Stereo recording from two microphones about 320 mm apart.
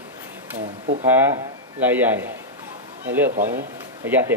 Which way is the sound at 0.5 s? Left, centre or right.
Right.